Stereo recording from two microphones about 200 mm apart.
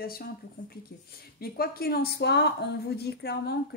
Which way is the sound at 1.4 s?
50° left (ahead or behind).